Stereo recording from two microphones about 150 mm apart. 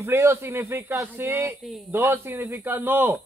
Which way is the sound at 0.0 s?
15° right (ahead or behind).